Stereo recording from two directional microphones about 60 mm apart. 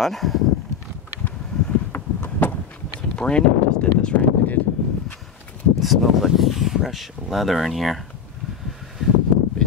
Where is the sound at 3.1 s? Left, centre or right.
Centre.